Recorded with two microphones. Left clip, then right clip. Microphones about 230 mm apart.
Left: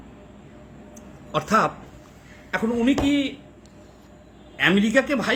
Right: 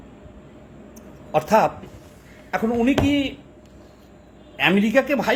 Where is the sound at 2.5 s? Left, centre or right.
Centre.